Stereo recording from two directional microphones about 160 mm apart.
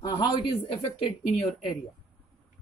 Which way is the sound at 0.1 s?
35° left (ahead or behind).